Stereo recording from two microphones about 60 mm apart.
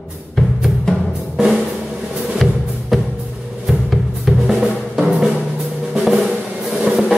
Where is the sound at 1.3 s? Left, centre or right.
Centre.